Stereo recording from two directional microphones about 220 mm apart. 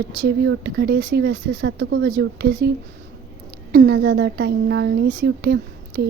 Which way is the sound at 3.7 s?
50° right (ahead or behind).